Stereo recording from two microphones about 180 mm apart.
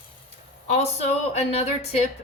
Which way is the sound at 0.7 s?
35° left (ahead or behind).